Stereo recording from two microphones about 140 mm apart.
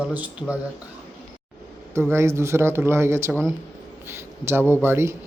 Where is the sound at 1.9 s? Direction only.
20° right (ahead or behind).